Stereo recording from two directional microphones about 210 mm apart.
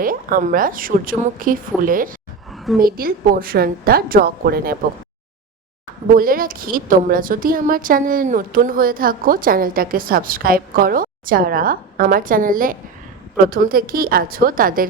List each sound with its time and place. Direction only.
0.0 s speech: 40° right (ahead or behind)
2.5 s a sound: centre (ahead or behind)
2.8 s a woman's voice: 45° right (ahead or behind)
6.1 s a woman's voice: 40° right (ahead or behind)